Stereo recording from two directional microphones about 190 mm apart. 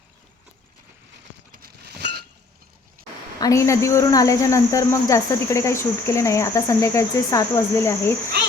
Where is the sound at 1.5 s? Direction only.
55° right (ahead or behind).